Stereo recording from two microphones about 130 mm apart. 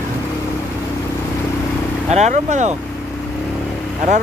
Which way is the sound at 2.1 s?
60° right (ahead or behind).